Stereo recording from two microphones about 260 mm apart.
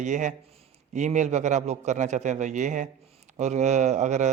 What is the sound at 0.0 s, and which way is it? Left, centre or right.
A man's voice, right.